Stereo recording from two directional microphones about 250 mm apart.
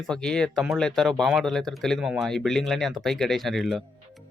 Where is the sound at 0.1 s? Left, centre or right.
Centre.